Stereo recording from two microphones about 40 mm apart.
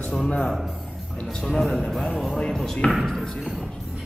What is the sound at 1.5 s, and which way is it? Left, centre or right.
Speech, centre.